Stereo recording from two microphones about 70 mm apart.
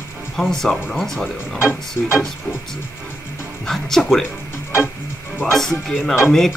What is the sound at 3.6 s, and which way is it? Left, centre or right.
Speech, centre.